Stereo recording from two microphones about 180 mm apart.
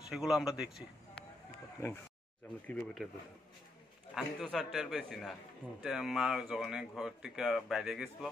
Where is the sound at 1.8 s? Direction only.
15° left (ahead or behind).